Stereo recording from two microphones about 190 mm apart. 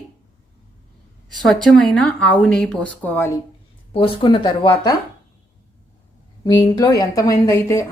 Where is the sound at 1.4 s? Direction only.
5° left (ahead or behind).